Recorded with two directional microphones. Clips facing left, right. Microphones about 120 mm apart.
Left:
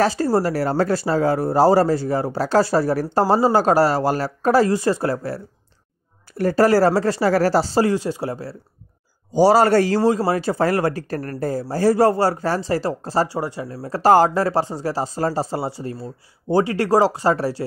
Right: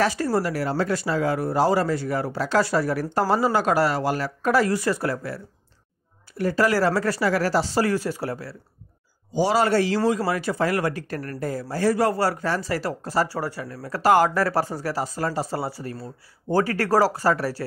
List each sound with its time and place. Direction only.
0.0 s speech: 30° left (ahead or behind)
6.3 s speech: 40° left (ahead or behind)
7.8 s speech: 20° left (ahead or behind)
9.3 s speech: 40° left (ahead or behind); by 17.6 s 25° left (ahead or behind)